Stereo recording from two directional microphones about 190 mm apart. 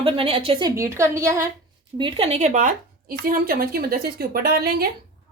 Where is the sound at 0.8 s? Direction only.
15° right (ahead or behind).